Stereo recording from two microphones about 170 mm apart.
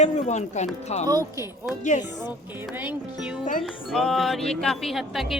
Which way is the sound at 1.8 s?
45° left (ahead or behind).